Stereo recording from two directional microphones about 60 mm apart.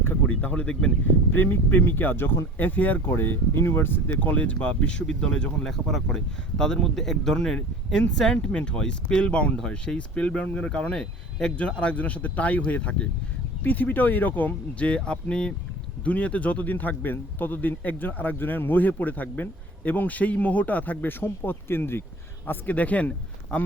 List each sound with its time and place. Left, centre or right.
0.0 s a sound: left
1.3 s a man's voice: left
22.4 s speech: left